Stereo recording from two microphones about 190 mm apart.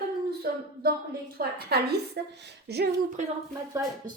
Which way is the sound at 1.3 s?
55° right (ahead or behind).